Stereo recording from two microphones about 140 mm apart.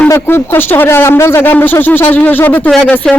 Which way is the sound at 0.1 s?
15° left (ahead or behind).